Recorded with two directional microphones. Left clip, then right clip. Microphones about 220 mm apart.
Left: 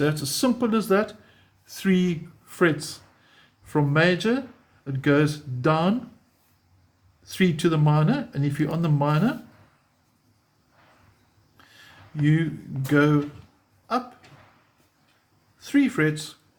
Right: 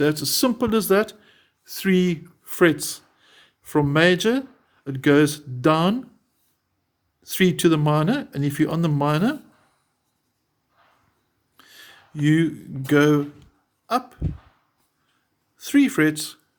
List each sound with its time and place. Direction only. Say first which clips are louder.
0.0 s speech: right 3 dB; 40° right (ahead or behind)
7.3 s speech: right 4 dB; 50° right (ahead or behind)
11.5 s a sound: right 4 dB; 50° right (ahead or behind)
12.2 s speech: right 5 dB; 50° right (ahead or behind)
15.5 s speech: right 3 dB; 50° right (ahead or behind)